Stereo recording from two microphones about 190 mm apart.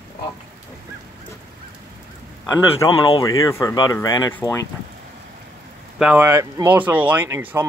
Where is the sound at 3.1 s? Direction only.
25° left (ahead or behind).